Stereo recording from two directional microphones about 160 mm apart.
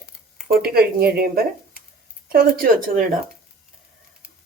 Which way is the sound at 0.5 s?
75° right (ahead or behind).